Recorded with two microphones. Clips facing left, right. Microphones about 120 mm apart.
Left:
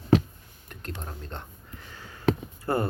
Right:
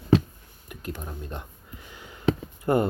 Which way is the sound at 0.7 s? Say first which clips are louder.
Right 3 dB; 5° right (ahead or behind).